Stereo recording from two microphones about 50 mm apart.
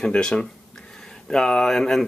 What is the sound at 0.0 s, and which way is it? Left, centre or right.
Speech, centre.